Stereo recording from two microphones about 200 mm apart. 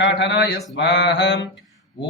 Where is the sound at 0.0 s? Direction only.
60° left (ahead or behind).